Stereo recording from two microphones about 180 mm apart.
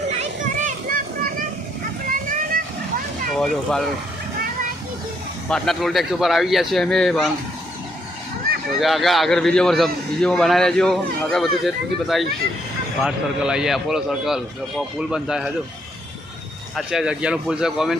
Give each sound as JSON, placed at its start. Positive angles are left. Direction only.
{"t": 0.1, "sound": "children playing", "side_deg": -45}
{"t": 2.0, "sound": "vehicle", "side_deg": -50}
{"t": 3.3, "sound": "a man's voice", "side_deg": 5}
{"t": 5.5, "sound": "a man's voice", "side_deg": 0}
{"t": 8.8, "sound": "a man's voice", "side_deg": 0}
{"t": 16.7, "sound": "a man's voice", "side_deg": -5}